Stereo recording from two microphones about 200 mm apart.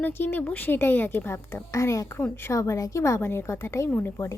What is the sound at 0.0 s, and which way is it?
A woman's voice, 10° left (ahead or behind).